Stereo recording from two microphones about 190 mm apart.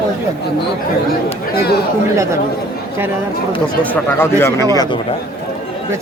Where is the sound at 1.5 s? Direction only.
55° left (ahead or behind).